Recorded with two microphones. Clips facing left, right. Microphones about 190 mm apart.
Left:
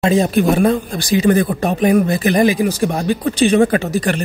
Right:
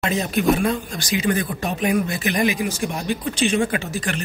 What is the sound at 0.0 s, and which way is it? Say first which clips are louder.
A man's voice: left 7 dB; 35° left (ahead or behind).